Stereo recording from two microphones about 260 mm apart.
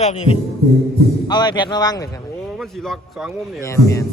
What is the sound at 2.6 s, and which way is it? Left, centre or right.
Speech, centre.